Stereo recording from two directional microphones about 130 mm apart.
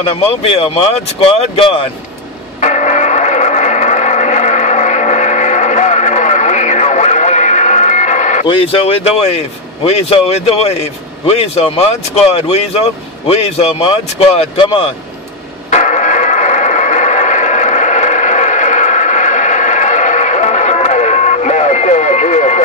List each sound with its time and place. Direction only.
0.1 s speech: 50° left (ahead or behind)
2.6 s radio: 65° left (ahead or behind)
8.7 s speech: 50° left (ahead or behind)
15.7 s music: 70° left (ahead or behind)